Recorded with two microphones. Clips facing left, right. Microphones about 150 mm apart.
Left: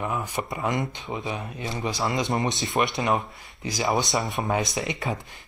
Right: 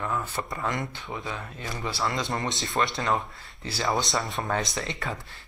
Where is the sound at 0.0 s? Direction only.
15° left (ahead or behind).